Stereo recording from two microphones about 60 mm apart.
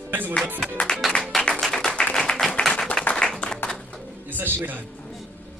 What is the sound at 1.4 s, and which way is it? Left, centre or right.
Music, centre.